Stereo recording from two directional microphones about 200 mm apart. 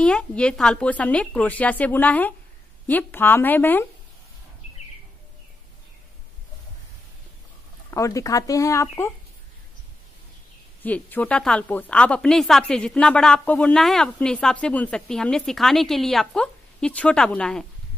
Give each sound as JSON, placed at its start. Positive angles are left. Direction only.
{"t": 0.0, "sound": "a woman's voice", "side_deg": 5}
{"t": 7.9, "sound": "a woman's voice", "side_deg": 15}
{"t": 10.8, "sound": "a woman's voice", "side_deg": 10}